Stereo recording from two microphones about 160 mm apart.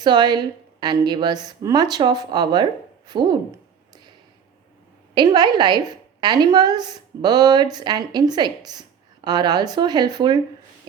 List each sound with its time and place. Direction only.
0.0 s a woman's voice: 25° right (ahead or behind)
5.1 s a woman's voice: 25° right (ahead or behind)